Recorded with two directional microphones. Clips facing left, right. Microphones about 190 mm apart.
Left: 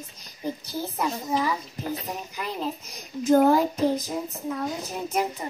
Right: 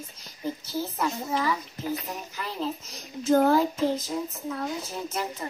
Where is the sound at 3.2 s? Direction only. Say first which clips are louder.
Left 2 dB; 15° left (ahead or behind).